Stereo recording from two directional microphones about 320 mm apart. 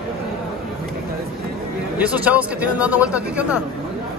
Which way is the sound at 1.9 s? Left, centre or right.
Centre.